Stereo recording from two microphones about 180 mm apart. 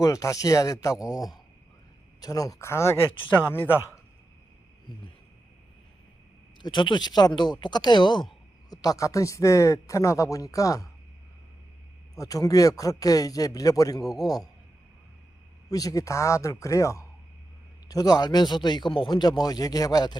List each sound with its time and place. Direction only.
0.0 s speech: 20° left (ahead or behind)
6.6 s speech: 25° left (ahead or behind)
12.1 s speech: 20° left (ahead or behind)
15.7 s speech: 20° left (ahead or behind)